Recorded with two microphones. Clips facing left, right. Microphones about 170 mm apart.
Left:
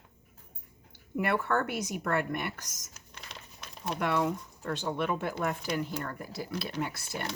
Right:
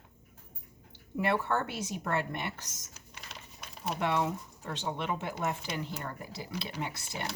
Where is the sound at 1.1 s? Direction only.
25° right (ahead or behind).